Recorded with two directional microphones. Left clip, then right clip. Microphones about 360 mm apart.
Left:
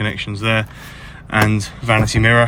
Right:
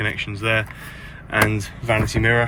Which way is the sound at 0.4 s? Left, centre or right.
Left.